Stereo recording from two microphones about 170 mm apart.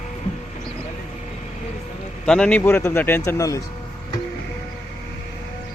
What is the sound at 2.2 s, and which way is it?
Speech, 5° left (ahead or behind).